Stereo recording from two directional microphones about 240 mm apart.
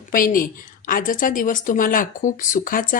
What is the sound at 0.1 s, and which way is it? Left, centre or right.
Speech, left.